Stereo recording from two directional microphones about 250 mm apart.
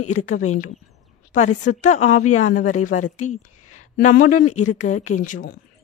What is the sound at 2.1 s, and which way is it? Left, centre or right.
Speech, left.